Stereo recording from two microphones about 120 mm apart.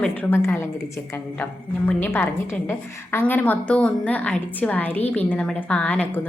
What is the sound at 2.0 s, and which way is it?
Speech, 20° left (ahead or behind).